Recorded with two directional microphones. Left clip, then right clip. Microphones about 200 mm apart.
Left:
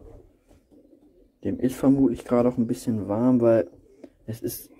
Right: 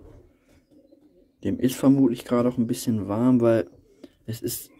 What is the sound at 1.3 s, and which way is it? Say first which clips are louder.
Speech: right 1 dB; 20° right (ahead or behind).